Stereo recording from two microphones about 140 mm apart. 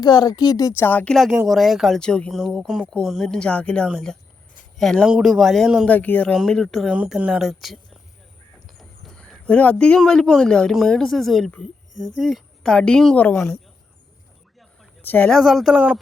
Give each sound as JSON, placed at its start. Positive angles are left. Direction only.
{"t": 0.0, "sound": "speech", "side_deg": 30}
{"t": 1.1, "sound": "speech", "side_deg": 0}
{"t": 5.8, "sound": "speech", "side_deg": 10}
{"t": 6.9, "sound": "speech", "side_deg": -10}
{"t": 15.0, "sound": "speech", "side_deg": 10}